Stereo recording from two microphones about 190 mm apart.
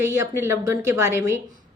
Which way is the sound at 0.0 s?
10° right (ahead or behind).